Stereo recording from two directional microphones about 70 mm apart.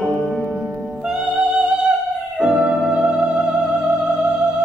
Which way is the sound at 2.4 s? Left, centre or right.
Centre.